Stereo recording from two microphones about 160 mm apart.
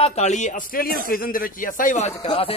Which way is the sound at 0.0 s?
45° left (ahead or behind).